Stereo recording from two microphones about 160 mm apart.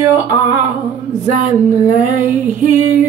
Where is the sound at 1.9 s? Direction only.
55° right (ahead or behind).